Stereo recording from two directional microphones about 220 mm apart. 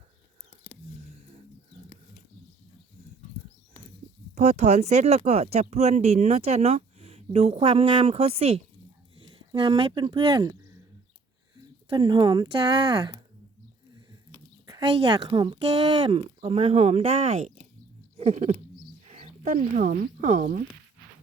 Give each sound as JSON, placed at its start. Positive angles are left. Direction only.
{"t": 4.4, "sound": "speech", "side_deg": -30}
{"t": 14.7, "sound": "speech", "side_deg": -20}
{"t": 18.2, "sound": "a sound", "side_deg": -30}
{"t": 19.1, "sound": "speech", "side_deg": -30}